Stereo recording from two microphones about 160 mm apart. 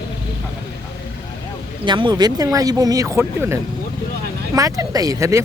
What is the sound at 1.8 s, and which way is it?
Speech, 30° right (ahead or behind).